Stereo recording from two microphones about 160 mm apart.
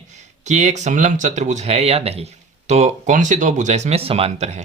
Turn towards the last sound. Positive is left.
turn(degrees=-45)  # may be behind; listen again after turning